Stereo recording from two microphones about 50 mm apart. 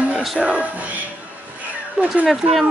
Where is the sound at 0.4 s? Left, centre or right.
Right.